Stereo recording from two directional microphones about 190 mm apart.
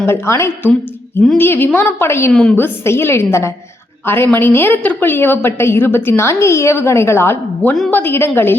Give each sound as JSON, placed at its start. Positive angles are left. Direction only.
{"t": 0.0, "sound": "a woman's voice", "side_deg": 15}